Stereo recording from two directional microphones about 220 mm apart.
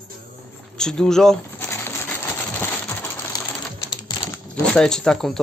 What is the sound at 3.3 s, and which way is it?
Sewing machine, 15° left (ahead or behind).